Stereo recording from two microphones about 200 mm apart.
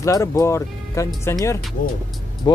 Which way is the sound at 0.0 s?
15° left (ahead or behind).